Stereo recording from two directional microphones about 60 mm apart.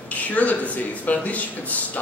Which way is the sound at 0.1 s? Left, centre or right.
Left.